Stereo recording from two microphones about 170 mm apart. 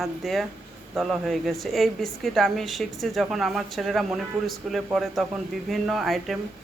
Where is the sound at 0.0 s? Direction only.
Centre (ahead or behind).